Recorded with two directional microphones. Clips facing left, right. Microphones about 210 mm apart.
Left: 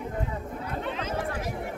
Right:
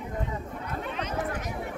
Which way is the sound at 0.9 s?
30° left (ahead or behind).